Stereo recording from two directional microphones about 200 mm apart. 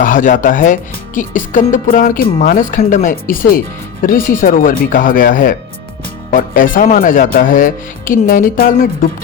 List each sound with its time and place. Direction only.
0.0 s speech: 40° left (ahead or behind)